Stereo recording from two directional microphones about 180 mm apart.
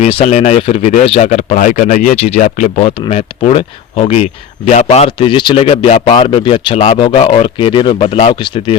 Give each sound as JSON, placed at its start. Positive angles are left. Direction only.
{"t": 0.0, "sound": "speech", "side_deg": 35}